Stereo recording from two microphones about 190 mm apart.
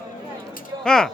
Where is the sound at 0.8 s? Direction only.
5° left (ahead or behind).